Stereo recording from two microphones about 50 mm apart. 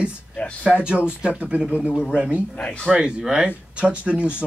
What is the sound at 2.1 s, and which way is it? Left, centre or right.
Speech, right.